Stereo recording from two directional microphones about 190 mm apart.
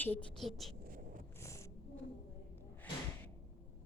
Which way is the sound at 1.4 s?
15° left (ahead or behind).